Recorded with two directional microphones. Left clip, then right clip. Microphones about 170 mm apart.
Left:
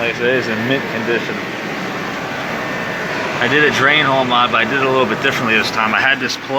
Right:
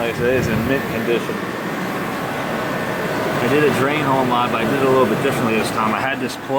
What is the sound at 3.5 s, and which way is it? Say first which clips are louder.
Speech: left 6 dB; 5° right (ahead or behind).